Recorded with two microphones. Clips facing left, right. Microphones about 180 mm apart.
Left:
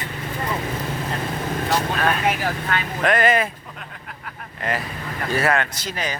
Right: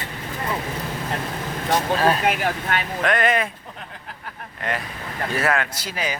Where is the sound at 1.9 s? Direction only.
30° right (ahead or behind).